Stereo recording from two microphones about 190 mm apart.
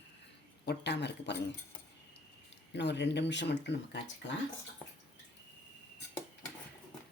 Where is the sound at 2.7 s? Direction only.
65° left (ahead or behind).